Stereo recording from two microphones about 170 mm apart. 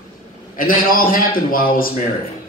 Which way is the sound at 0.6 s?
55° left (ahead or behind).